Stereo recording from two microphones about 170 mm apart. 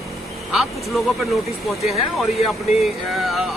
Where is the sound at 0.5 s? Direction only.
Centre (ahead or behind).